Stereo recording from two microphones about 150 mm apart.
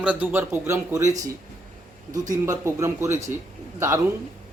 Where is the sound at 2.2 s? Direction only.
20° right (ahead or behind).